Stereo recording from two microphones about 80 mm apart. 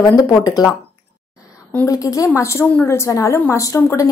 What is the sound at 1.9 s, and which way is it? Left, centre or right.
A woman's voice, left.